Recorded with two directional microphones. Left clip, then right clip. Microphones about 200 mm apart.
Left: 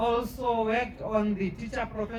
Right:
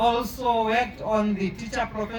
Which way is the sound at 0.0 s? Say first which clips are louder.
Right 5 dB; 55° right (ahead or behind).